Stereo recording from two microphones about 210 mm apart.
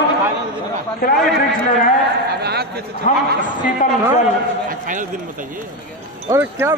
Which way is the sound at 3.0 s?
35° left (ahead or behind).